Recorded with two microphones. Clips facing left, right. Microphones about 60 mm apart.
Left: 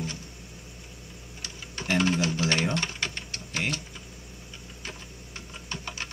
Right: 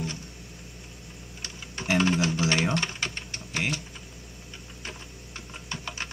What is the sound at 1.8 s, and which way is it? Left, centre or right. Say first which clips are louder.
Music: right 1 dB; right.